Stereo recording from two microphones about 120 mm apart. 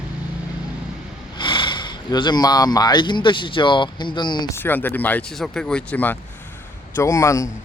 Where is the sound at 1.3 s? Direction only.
40° left (ahead or behind).